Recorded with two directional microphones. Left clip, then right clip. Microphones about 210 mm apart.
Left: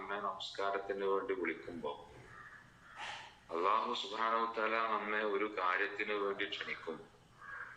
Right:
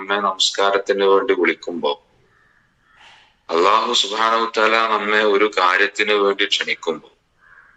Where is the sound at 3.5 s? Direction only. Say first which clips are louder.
Right 18 dB; 50° right (ahead or behind).